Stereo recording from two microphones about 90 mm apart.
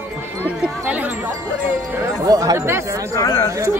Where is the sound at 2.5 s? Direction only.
30° right (ahead or behind).